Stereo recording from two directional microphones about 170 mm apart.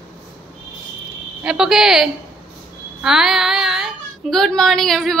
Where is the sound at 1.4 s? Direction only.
5° right (ahead or behind).